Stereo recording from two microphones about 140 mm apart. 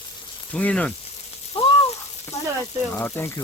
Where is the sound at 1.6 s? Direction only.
45° left (ahead or behind).